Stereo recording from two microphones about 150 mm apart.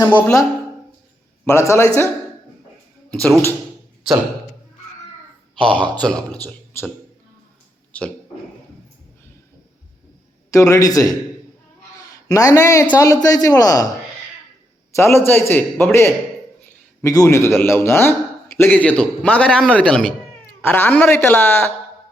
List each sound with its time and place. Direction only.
0.1 s a man's voice: 15° left (ahead or behind)
1.5 s a man's voice: 20° left (ahead or behind)
3.1 s a man's voice: 10° left (ahead or behind)
5.5 s a man's voice: 5° left (ahead or behind)
10.5 s a man's voice: 20° left (ahead or behind)
12.3 s a man's voice: 25° left (ahead or behind)
14.9 s a man's voice: 15° left (ahead or behind)